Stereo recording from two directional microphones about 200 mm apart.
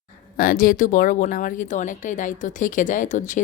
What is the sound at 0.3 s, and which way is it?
Speech, 45° left (ahead or behind).